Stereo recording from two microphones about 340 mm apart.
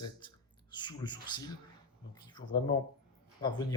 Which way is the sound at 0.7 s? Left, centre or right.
Centre.